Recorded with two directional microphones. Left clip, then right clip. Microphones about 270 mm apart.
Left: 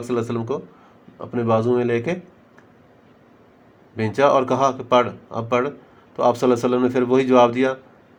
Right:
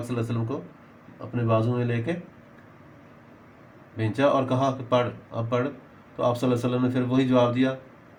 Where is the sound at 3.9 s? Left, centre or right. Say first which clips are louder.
Left 6 dB; left.